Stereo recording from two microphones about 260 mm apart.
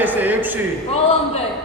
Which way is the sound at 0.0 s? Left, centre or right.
Centre.